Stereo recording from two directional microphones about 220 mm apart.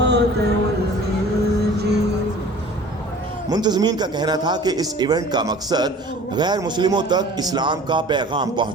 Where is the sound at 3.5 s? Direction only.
20° right (ahead or behind).